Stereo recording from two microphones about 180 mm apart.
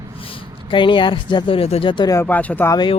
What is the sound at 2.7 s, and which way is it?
Speech, 25° left (ahead or behind).